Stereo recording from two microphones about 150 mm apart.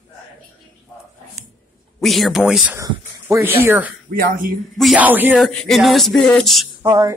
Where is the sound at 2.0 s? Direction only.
Centre (ahead or behind).